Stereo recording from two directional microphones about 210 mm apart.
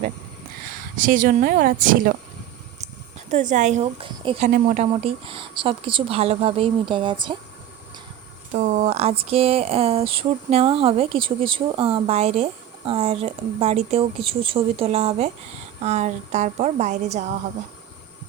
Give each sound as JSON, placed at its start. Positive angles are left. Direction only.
{"t": 0.7, "sound": "speech", "side_deg": -40}
{"t": 3.2, "sound": "speech", "side_deg": -35}
{"t": 8.5, "sound": "speech", "side_deg": -35}